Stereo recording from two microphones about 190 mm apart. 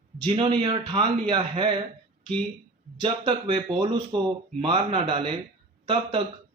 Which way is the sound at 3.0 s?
30° right (ahead or behind).